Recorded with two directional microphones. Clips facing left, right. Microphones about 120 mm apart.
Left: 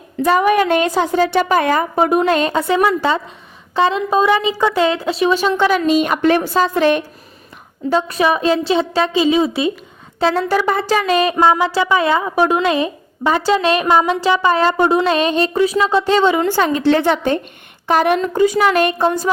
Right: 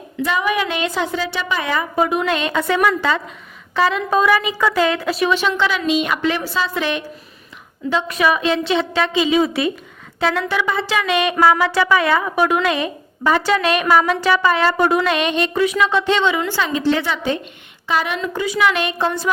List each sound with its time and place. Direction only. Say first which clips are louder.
0.2 s a woman's voice: left 6 dB; 45° left (ahead or behind); by 5.4 s 25° left (ahead or behind)
5.4 s a woman's voice: left 4 dB; 40° left (ahead or behind)
7.9 s speech: left 2 dB; 35° left (ahead or behind)
11.3 s a woman's voice: left 1 dB; 20° left (ahead or behind); by 19.0 s 45° left (ahead or behind)